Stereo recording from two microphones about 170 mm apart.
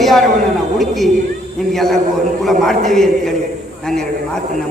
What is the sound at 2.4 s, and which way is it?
Speech, centre (ahead or behind).